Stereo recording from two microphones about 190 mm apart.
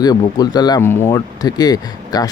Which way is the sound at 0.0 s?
20° left (ahead or behind).